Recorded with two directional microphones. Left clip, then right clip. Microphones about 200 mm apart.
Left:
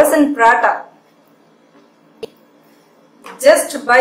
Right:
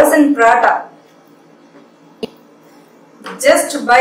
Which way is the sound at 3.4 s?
25° left (ahead or behind).